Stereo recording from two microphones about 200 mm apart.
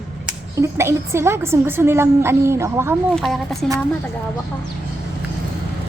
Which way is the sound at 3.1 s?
Centre (ahead or behind).